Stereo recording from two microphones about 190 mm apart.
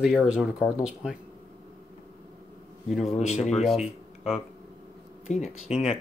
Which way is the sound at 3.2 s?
35° left (ahead or behind).